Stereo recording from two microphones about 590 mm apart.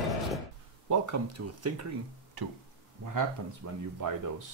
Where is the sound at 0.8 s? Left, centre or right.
Right.